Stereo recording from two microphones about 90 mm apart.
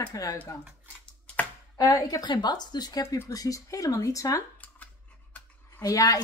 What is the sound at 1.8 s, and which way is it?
Speech, 45° left (ahead or behind).